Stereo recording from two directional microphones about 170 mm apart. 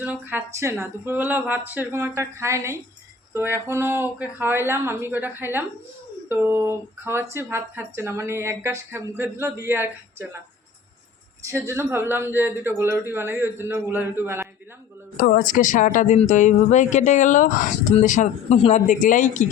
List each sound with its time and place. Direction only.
0.0 s speech: 10° right (ahead or behind)
11.4 s speech: 15° right (ahead or behind)
15.2 s speech: 55° left (ahead or behind)